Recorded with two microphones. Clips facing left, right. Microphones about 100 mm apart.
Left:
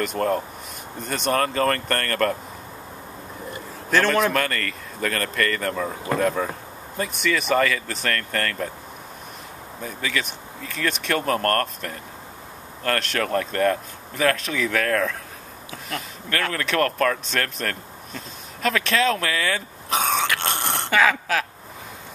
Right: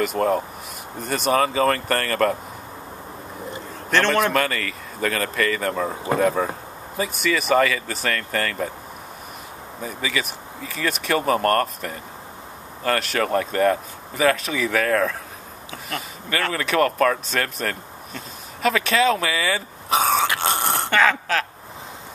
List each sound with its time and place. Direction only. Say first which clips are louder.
0.0 s speech: right 2 dB; 5° right (ahead or behind)
3.9 s speech: right 1 dB; centre (ahead or behind)
9.8 s speech: right 1 dB; 5° right (ahead or behind)
20.3 s a sound: right 3 dB; centre (ahead or behind)